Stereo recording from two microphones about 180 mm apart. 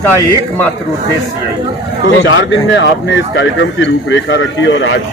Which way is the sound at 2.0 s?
90° left.